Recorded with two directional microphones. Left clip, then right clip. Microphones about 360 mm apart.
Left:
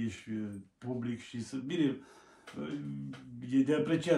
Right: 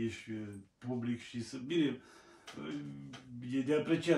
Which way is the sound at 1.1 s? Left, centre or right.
Centre.